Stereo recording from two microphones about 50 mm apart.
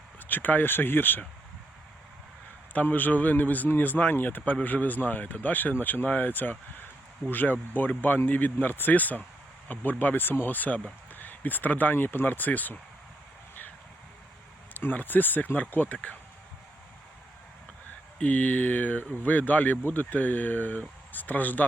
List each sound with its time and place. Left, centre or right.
0.3 s speech: left
2.7 s speech: left
14.7 s speech: left
18.2 s speech: left